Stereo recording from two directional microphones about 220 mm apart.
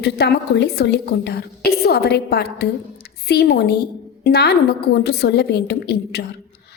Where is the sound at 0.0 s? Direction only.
50° left (ahead or behind).